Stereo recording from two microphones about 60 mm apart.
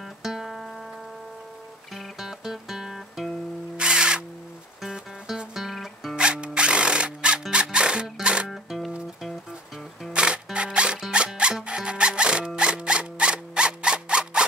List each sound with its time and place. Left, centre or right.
0.2 s music: centre
2.1 s music: centre
3.7 s drill: centre
4.8 s music: centre
6.1 s music: centre
8.5 s music: centre
10.1 s music: centre
11.6 s zipper: centre